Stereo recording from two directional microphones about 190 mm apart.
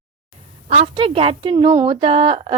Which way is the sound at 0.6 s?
40° right (ahead or behind).